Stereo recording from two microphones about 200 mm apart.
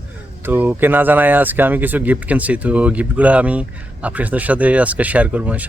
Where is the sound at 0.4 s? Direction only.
10° right (ahead or behind).